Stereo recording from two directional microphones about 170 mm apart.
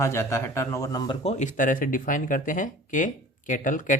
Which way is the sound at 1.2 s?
45° left (ahead or behind).